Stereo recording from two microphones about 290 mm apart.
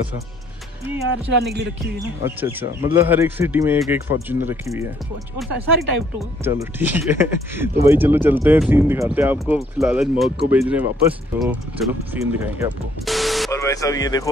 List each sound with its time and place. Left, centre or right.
1.3 s speech: right
2.0 s speech: centre
13.5 s speech: centre